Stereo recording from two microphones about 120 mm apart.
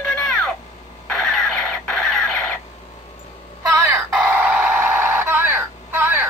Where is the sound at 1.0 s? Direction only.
5° left (ahead or behind).